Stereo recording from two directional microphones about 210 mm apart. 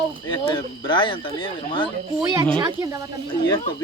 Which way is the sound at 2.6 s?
20° right (ahead or behind).